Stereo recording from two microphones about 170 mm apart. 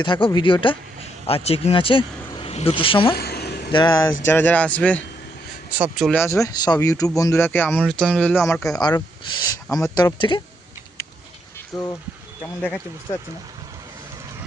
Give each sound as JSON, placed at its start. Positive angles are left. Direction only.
{"t": 0.0, "sound": "speech", "side_deg": 25}
{"t": 3.2, "sound": "a sound", "side_deg": 70}
{"t": 3.7, "sound": "speech", "side_deg": 25}
{"t": 4.3, "sound": "speech", "side_deg": 10}
{"t": 5.7, "sound": "speech", "side_deg": -5}
{"t": 6.1, "sound": "speech", "side_deg": 15}
{"t": 7.8, "sound": "speech", "side_deg": 0}
{"t": 8.8, "sound": "speech", "side_deg": 25}
{"t": 11.7, "sound": "speech", "side_deg": 5}